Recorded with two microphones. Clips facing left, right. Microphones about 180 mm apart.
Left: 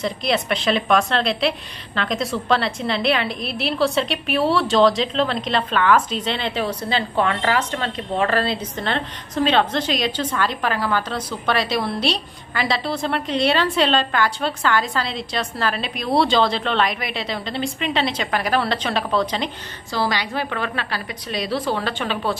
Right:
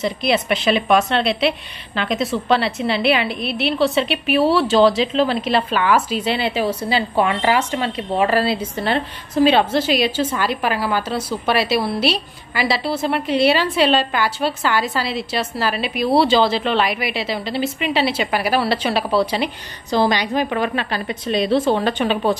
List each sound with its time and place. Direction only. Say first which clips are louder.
0.0 s a woman's voice: right 3 dB; 5° right (ahead or behind)
19.9 s a woman's voice: right 6 dB; 20° right (ahead or behind)